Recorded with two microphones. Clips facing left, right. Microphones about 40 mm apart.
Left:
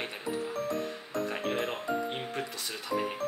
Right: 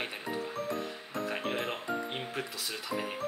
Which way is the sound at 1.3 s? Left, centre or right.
Centre.